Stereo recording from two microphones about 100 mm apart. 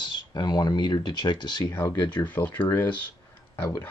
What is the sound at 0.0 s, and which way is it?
Speech, 50° left (ahead or behind).